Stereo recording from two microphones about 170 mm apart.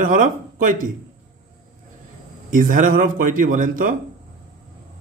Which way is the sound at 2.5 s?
55° right (ahead or behind).